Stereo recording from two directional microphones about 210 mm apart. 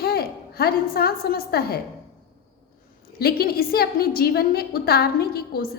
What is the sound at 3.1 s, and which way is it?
A woman's voice, 45° left (ahead or behind).